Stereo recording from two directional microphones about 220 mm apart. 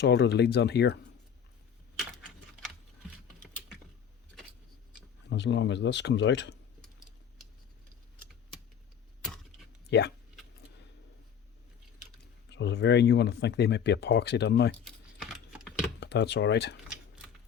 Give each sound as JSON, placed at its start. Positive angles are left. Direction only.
{"t": 0.0, "sound": "speech", "side_deg": 50}
{"t": 5.3, "sound": "speech", "side_deg": 55}
{"t": 9.9, "sound": "speech", "side_deg": 50}
{"t": 12.5, "sound": "speech", "side_deg": 50}
{"t": 14.8, "sound": "typing", "side_deg": 0}
{"t": 16.0, "sound": "speech", "side_deg": 50}